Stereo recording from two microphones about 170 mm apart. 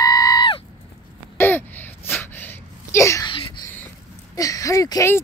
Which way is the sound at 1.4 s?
15° left (ahead or behind).